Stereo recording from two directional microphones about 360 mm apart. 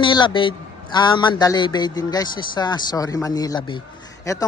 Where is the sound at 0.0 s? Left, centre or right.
Centre.